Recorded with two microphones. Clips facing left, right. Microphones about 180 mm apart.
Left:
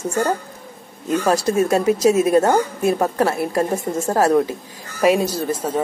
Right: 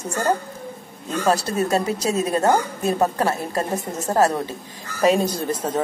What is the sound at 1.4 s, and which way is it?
A woman's voice, 10° left (ahead or behind).